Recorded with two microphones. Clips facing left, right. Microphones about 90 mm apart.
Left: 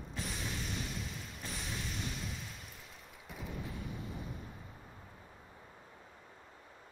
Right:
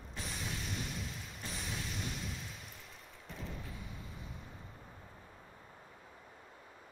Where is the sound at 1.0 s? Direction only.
Centre (ahead or behind).